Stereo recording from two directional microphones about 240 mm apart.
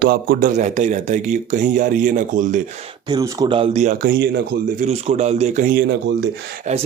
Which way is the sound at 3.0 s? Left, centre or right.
Centre.